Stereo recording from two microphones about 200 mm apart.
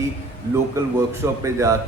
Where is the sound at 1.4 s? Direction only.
15° right (ahead or behind).